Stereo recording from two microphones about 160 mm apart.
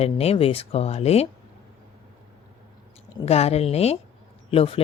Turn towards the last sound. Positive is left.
turn(degrees=35)  # may be behind; listen again after turning